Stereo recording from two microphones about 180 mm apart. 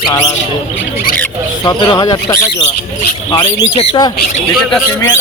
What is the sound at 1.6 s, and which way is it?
Speech, 20° left (ahead or behind).